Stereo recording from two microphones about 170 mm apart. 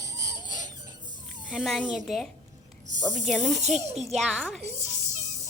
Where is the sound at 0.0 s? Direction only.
20° right (ahead or behind).